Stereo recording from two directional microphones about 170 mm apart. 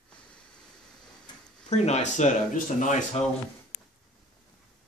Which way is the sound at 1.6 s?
40° left (ahead or behind).